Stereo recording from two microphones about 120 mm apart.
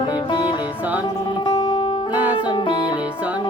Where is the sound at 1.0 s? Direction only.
40° left (ahead or behind).